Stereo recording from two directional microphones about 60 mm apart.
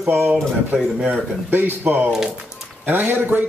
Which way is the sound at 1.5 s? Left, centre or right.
Right.